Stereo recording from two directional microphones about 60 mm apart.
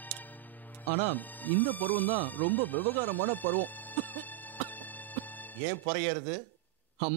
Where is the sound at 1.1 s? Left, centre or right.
Left.